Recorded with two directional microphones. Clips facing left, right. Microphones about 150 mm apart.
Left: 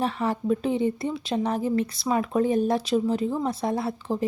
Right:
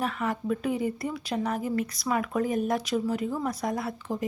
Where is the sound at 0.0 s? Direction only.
30° left (ahead or behind).